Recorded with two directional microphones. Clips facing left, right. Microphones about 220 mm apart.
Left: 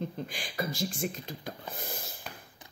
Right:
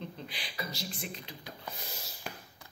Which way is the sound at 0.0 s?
45° left (ahead or behind).